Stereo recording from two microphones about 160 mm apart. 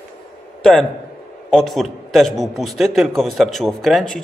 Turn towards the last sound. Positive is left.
turn(degrees=0)  # may be behind; listen again after turning